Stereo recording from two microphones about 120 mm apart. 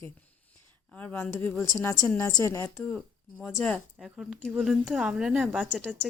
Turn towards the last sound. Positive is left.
turn(degrees=0)  # may be behind; listen again after turning